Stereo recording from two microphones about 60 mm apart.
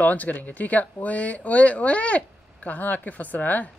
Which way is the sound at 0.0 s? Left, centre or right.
Left.